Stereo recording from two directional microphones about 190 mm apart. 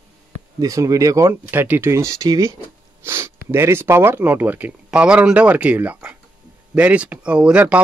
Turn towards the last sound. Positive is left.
turn(degrees=-5)  # may be behind; listen again after turning